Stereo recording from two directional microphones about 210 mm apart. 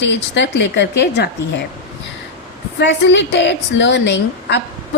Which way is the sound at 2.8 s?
55° left (ahead or behind).